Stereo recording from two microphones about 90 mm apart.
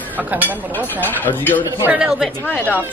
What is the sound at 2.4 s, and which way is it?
Speech, 20° left (ahead or behind).